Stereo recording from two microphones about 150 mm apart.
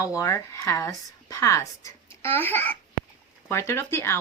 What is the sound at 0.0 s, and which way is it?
A child's voice, 20° left (ahead or behind).